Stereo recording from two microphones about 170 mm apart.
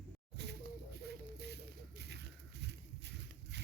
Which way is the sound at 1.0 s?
80° right.